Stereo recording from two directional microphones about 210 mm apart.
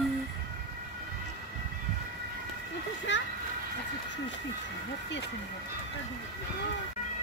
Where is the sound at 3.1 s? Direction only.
60° left (ahead or behind).